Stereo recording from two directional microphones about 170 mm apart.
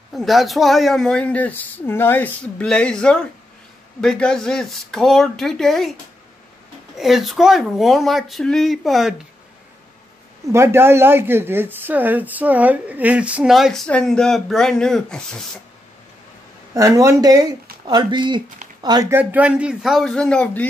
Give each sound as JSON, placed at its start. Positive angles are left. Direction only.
{"t": 0.1, "sound": "speech", "side_deg": 0}
{"t": 7.0, "sound": "speech", "side_deg": 0}
{"t": 10.5, "sound": "speech", "side_deg": -15}
{"t": 16.7, "sound": "speech", "side_deg": -20}